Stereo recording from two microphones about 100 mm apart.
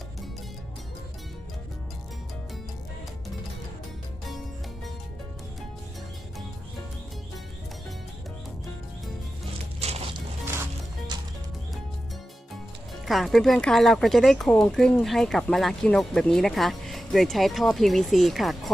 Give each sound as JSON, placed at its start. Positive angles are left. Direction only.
{"t": 9.8, "sound": "music", "side_deg": -90}
{"t": 11.1, "sound": "music", "side_deg": -45}
{"t": 13.1, "sound": "speech", "side_deg": 0}